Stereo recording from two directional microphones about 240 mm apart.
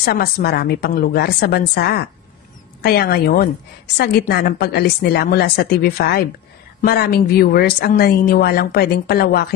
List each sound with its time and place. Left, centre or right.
0.0 s speech: left